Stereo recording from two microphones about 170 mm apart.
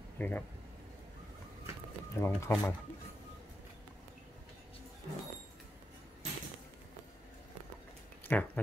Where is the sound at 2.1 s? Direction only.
15° left (ahead or behind).